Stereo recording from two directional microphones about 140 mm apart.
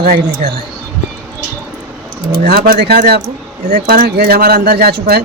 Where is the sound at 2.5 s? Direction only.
90° right.